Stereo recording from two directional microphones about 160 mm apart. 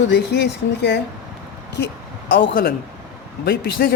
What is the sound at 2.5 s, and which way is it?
Speech, 60° left (ahead or behind).